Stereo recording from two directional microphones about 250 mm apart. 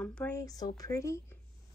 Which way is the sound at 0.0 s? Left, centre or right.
Centre.